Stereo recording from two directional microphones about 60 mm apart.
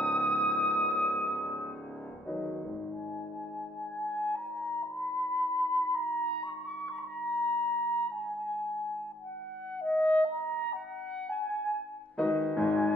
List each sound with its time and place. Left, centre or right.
0.0 s music: left
2.3 s music: centre
4.0 s music: left
9.8 s music: left
12.2 s music: centre